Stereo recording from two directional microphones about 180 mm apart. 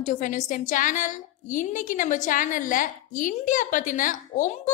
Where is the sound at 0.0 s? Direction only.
45° left (ahead or behind).